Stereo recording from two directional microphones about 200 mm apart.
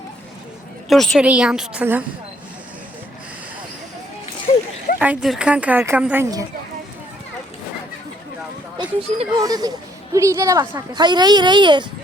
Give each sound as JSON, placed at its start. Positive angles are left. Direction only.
{"t": 0.9, "sound": "a woman's voice", "side_deg": 0}
{"t": 4.5, "sound": "a sound", "side_deg": 35}
{"t": 4.9, "sound": "speech", "side_deg": -5}
{"t": 8.8, "sound": "speech", "side_deg": -30}